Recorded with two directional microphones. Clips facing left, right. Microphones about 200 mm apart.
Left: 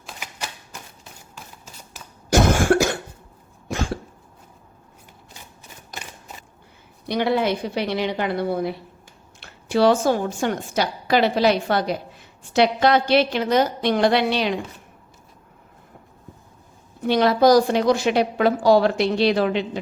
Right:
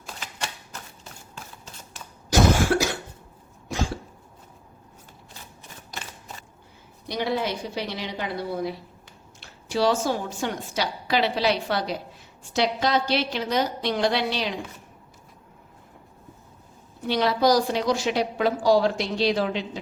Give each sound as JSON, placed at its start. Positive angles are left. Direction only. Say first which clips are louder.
{"t": 0.2, "sound": "typewriter", "louder": "even", "side_deg": 15}
{"t": 2.3, "sound": "cough", "louder": "left 3 dB", "side_deg": 50}
{"t": 7.1, "sound": "a woman's voice", "louder": "left 6 dB", "side_deg": 60}
{"t": 17.1, "sound": "a woman's voice", "louder": "left 5 dB", "side_deg": 50}